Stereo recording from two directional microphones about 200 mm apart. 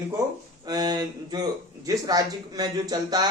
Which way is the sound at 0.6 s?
20° right (ahead or behind).